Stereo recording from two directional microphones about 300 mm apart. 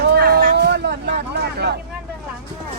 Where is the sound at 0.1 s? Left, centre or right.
Right.